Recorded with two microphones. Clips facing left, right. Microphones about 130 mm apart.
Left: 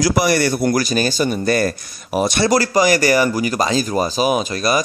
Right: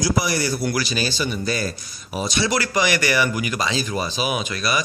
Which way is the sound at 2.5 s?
40° left (ahead or behind).